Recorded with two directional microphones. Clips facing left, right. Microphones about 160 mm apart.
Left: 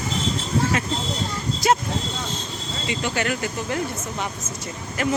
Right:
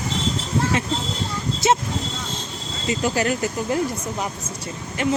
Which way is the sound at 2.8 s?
40° right (ahead or behind).